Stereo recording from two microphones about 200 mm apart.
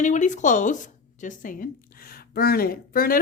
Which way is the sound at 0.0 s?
35° left (ahead or behind).